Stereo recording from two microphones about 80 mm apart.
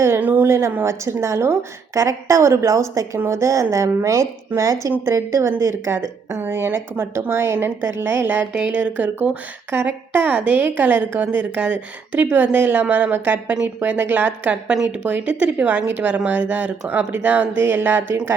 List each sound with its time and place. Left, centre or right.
0.2 s a sound: right
0.4 s a woman's voice: right
3.2 s a woman's voice: right